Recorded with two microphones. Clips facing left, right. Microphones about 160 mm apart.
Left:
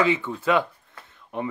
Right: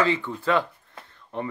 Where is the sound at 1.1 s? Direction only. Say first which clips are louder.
Left 1 dB; 15° left (ahead or behind).